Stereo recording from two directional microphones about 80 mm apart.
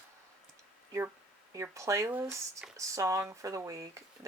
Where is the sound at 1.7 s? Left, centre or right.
Right.